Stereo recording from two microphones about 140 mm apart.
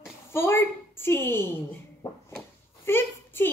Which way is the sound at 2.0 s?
40° left (ahead or behind).